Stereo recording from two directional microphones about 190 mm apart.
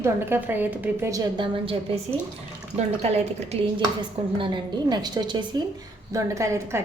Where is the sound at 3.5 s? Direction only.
30° right (ahead or behind).